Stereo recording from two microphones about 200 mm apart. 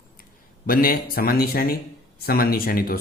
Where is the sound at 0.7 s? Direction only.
45° left (ahead or behind).